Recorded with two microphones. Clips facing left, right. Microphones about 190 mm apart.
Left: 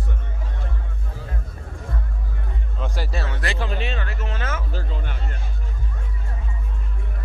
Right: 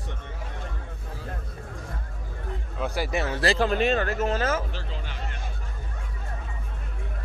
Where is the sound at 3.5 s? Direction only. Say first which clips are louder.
Right 6 dB; 45° right (ahead or behind).